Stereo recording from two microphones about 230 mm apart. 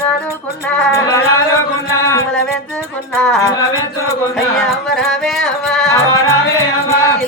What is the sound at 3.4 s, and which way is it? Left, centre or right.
Speech, centre.